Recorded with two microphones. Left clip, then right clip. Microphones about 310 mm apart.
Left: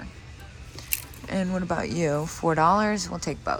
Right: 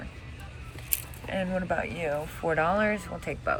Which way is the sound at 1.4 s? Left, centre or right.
Centre.